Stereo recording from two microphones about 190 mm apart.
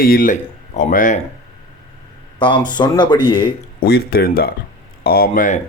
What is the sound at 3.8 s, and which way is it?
Speech, 55° left (ahead or behind).